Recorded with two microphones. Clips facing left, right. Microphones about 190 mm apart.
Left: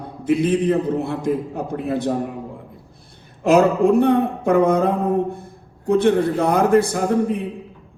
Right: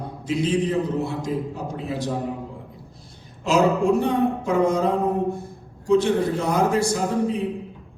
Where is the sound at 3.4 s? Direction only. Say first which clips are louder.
Left 5 dB; 60° left (ahead or behind).